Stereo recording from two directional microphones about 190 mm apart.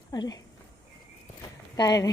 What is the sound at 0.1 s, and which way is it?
Speech, 20° left (ahead or behind).